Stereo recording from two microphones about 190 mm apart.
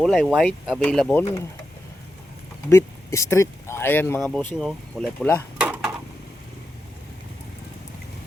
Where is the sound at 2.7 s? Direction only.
15° left (ahead or behind).